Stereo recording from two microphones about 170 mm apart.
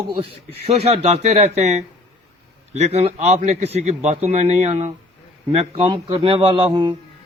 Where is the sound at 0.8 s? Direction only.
35° right (ahead or behind).